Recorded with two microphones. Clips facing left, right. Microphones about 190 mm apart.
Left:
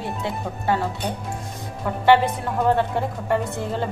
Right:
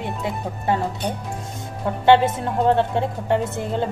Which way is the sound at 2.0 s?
25° right (ahead or behind).